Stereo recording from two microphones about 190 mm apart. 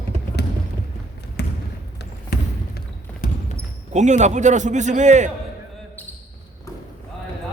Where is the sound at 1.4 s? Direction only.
60° left (ahead or behind).